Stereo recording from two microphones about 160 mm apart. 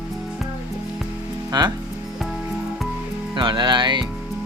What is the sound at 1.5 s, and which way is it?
Speech, 25° right (ahead or behind).